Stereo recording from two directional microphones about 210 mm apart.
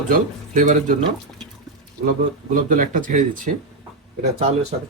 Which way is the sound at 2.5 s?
40° right (ahead or behind).